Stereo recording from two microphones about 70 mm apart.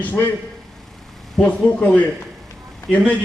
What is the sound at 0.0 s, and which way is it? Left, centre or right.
Speech, left.